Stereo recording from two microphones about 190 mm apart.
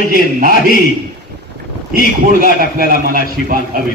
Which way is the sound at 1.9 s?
50° right (ahead or behind).